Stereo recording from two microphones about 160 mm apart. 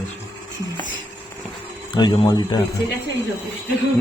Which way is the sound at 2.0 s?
30° left (ahead or behind).